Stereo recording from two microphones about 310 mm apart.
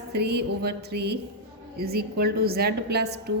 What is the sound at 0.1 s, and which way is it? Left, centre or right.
Speech, right.